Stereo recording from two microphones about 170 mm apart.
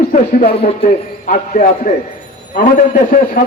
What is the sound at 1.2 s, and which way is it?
Speech, 50° left (ahead or behind).